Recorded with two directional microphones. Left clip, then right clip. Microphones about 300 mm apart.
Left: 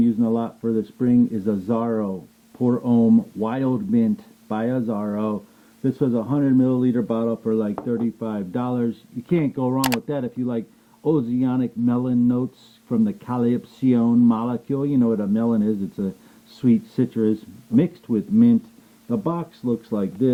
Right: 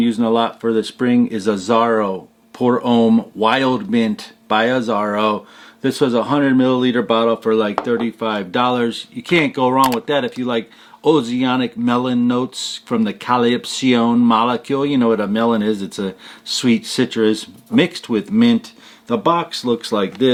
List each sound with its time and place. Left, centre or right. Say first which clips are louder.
0.0 s speech: right 6 dB; centre
2.0 s a sound: right 8 dB; right
2.6 s speech: right 6 dB; centre
3.0 s speech: right 4 dB; right
3.4 s speech: right 9 dB; centre